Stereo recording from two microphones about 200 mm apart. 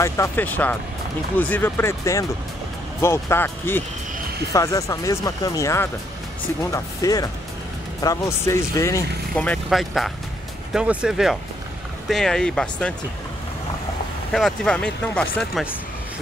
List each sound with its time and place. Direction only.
0.0 s speech: 10° left (ahead or behind)
14.3 s speech: centre (ahead or behind)